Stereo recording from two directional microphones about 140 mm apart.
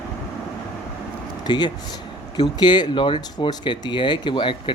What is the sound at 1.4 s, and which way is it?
Speech, 30° left (ahead or behind).